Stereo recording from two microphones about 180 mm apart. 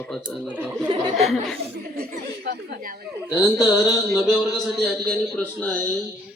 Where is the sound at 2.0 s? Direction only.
60° right (ahead or behind).